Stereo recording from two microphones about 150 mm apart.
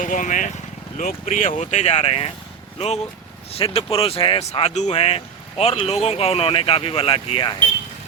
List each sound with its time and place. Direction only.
0.0 s speech: 60° left (ahead or behind); by 7.5 s 35° left (ahead or behind)